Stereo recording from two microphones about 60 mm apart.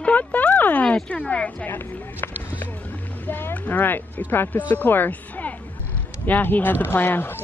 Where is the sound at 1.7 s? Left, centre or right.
Left.